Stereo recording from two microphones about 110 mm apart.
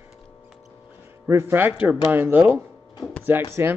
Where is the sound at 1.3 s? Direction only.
25° right (ahead or behind).